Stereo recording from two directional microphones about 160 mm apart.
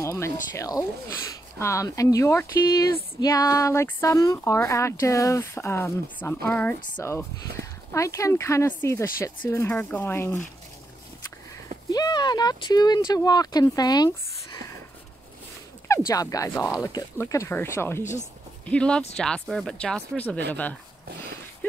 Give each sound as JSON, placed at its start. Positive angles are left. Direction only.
{"t": 0.0, "sound": "speech", "side_deg": 20}
{"t": 7.6, "sound": "speech", "side_deg": -90}
{"t": 7.9, "sound": "speech", "side_deg": 20}
{"t": 11.9, "sound": "speech", "side_deg": 25}
{"t": 16.1, "sound": "speech", "side_deg": 20}